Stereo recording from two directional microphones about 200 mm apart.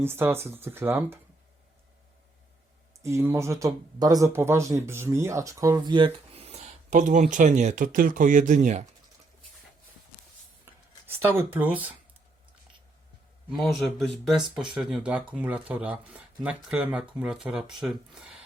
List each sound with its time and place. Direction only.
0.0 s speech: 10° right (ahead or behind)
3.0 s speech: 15° right (ahead or behind); by 8.8 s 40° right (ahead or behind)
11.0 s speech: 10° right (ahead or behind)
13.5 s speech: centre (ahead or behind)